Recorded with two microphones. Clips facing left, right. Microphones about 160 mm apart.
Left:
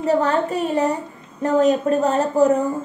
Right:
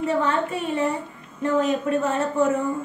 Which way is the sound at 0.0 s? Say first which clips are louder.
Left 4 dB; 40° left (ahead or behind).